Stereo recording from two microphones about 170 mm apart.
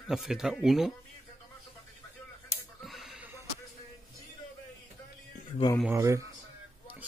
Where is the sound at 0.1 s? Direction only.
5° right (ahead or behind).